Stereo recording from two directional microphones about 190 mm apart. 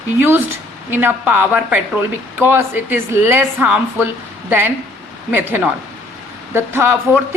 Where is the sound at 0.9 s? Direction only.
10° right (ahead or behind).